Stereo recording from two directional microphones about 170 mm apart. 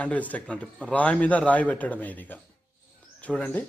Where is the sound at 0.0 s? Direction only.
10° left (ahead or behind).